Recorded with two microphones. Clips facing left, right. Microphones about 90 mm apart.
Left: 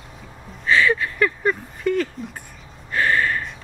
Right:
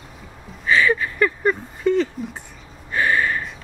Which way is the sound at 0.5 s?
5° right (ahead or behind).